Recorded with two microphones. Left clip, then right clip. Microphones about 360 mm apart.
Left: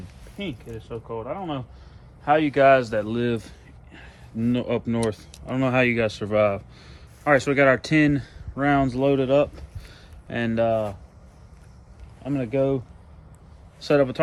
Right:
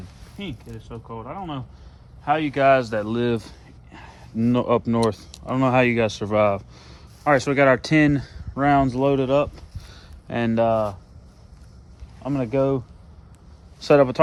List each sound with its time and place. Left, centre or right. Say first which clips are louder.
0.3 s speech: left 2 dB; centre
12.2 s speech: right 2 dB; centre